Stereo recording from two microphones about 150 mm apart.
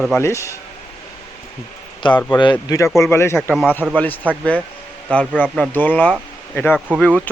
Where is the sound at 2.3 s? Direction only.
30° left (ahead or behind); by 4.2 s 10° left (ahead or behind).